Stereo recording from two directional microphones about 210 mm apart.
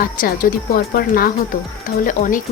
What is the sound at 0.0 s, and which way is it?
A woman's voice, 45° left (ahead or behind).